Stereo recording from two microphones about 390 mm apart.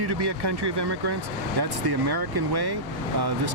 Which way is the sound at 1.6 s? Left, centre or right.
Right.